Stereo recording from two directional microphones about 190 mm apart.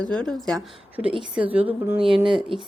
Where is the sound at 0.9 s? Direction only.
5° right (ahead or behind).